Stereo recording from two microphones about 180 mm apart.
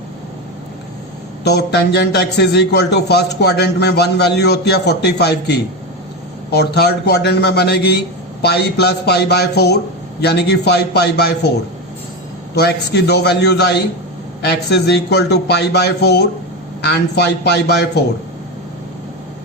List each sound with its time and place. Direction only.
1.5 s a man's voice: 65° left (ahead or behind)
12.5 s a man's voice: 65° left (ahead or behind)